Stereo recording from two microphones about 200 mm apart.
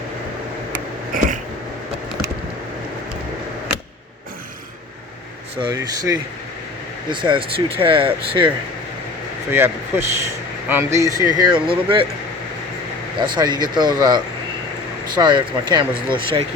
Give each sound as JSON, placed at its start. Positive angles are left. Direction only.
{"t": 1.1, "sound": "cat", "side_deg": -45}
{"t": 5.5, "sound": "speech", "side_deg": -20}
{"t": 9.5, "sound": "speech", "side_deg": -10}
{"t": 11.5, "sound": "speech", "side_deg": -25}
{"t": 13.1, "sound": "speech", "side_deg": -20}